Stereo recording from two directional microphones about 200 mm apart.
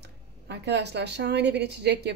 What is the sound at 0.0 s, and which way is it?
Speech, 60° right (ahead or behind).